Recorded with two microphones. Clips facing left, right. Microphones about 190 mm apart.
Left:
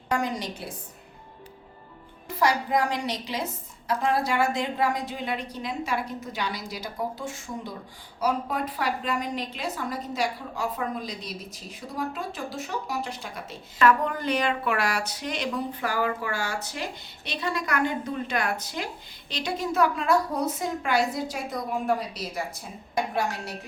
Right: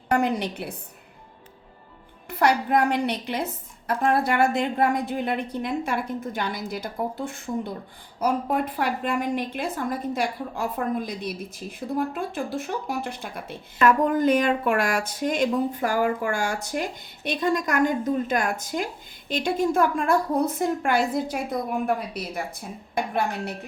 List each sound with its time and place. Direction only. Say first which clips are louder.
0.1 s a woman's voice: right 5 dB; 60° right (ahead or behind)
2.4 s a woman's voice: right 3 dB; 60° right (ahead or behind)